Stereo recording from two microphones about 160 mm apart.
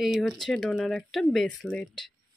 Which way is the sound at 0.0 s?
Centre (ahead or behind).